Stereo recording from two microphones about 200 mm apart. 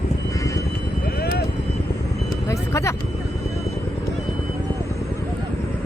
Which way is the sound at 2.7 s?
15° left (ahead or behind).